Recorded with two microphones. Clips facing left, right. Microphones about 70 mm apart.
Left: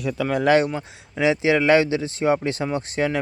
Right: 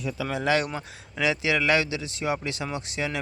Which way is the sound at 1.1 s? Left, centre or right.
Left.